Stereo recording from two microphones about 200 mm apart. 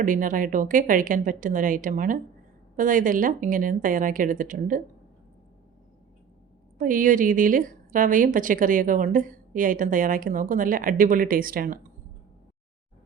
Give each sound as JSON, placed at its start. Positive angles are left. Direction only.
{"t": 0.0, "sound": "a woman's voice", "side_deg": -40}
{"t": 6.7, "sound": "a woman's voice", "side_deg": -40}